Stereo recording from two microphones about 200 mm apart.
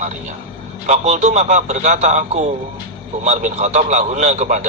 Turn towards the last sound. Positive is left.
turn(degrees=-35)  # may be behind; listen again after turning